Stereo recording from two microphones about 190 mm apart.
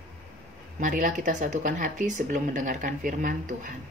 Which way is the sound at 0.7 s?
45° right (ahead or behind).